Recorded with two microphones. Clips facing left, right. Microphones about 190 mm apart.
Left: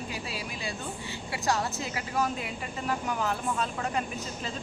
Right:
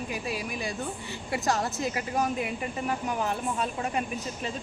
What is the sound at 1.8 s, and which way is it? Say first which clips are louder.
Speech: right 2 dB; 20° right (ahead or behind).